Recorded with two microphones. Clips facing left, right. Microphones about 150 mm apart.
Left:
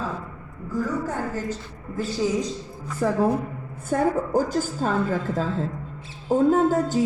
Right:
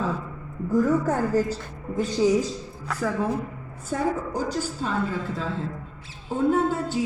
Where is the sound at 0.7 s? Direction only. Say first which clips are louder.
Right 5 dB; 45° right (ahead or behind).